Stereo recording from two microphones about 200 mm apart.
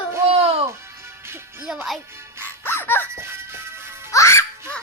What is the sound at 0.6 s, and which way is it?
Music, 15° right (ahead or behind).